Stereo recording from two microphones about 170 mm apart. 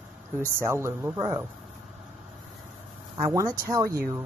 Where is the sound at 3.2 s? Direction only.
20° right (ahead or behind).